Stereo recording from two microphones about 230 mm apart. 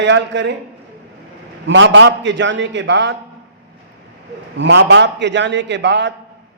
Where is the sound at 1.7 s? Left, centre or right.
Right.